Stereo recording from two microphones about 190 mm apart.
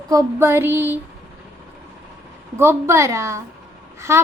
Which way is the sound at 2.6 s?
15° right (ahead or behind).